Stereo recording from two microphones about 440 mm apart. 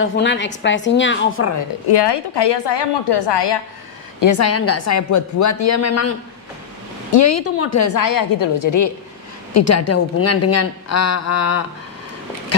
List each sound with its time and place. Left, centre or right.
0.0 s a woman's voice: left
1.9 s a woman's voice: left
4.2 s a woman's voice: left